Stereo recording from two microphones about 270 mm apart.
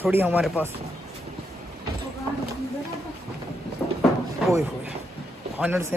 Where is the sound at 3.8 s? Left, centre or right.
Centre.